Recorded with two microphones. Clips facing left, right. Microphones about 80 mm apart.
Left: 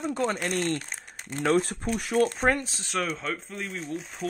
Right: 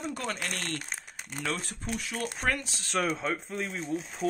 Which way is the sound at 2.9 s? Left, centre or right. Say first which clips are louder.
Right 1 dB; centre.